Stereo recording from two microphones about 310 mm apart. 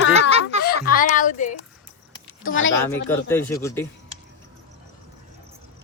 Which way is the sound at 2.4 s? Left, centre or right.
Left.